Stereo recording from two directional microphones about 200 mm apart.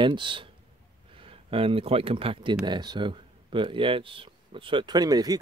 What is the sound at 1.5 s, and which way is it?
Speech, 30° right (ahead or behind).